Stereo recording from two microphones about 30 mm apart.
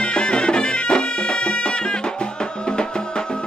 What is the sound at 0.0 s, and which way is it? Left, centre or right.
Music, left.